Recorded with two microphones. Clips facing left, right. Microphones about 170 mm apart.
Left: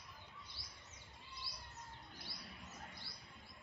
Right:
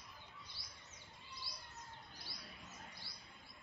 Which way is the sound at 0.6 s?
25° left (ahead or behind).